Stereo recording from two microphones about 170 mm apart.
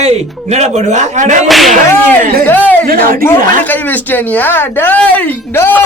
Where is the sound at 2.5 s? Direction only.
10° left (ahead or behind).